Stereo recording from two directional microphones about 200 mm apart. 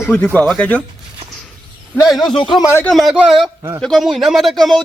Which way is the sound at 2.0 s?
Centre (ahead or behind).